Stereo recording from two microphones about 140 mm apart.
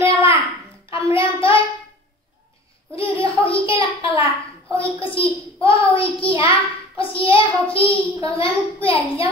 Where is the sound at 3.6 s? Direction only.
40° left (ahead or behind).